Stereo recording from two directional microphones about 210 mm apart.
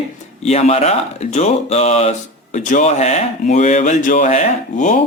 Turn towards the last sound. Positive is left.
turn(degrees=35)  # may be behind; listen again after turning